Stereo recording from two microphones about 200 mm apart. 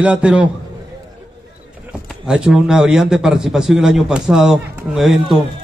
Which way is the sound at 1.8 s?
5° right (ahead or behind).